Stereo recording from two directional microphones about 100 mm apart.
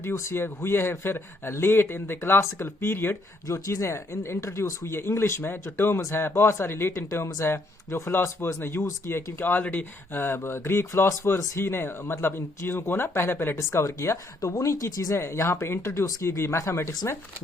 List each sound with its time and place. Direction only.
0.0 s speech: 30° left (ahead or behind)